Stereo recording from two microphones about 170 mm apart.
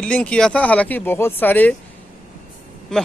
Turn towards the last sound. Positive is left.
turn(degrees=5)  # may be behind; listen again after turning